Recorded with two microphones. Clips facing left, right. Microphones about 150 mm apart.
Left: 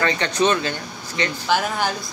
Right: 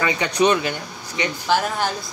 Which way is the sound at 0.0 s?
10° right (ahead or behind).